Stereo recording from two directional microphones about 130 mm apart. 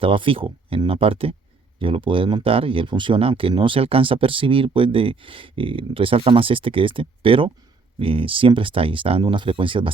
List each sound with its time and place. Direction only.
0.0 s speech: 40° right (ahead or behind)